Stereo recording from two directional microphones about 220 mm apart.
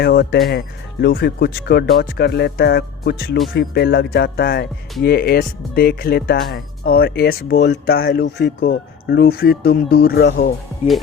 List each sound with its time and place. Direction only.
0.0 s speech: 45° left (ahead or behind)